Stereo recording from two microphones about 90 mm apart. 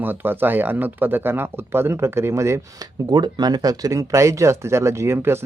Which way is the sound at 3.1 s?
50° right (ahead or behind).